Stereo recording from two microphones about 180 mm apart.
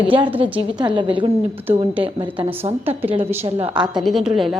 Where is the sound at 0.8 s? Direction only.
25° right (ahead or behind).